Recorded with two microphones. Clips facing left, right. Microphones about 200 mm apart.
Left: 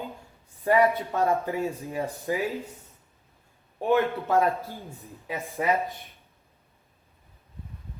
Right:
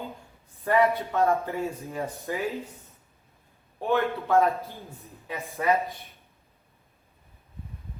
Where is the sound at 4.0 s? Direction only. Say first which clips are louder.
Right 1 dB; 10° left (ahead or behind).